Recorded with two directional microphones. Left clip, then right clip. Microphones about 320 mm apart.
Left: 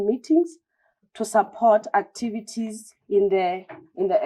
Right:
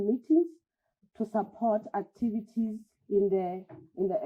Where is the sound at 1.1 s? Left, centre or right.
Centre.